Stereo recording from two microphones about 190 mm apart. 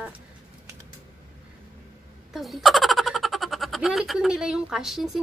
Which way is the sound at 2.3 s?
Centre (ahead or behind).